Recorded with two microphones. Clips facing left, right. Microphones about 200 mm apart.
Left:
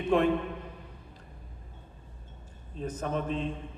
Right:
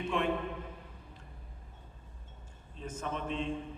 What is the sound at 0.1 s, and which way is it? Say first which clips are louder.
Speech: left 9 dB; 35° left (ahead or behind).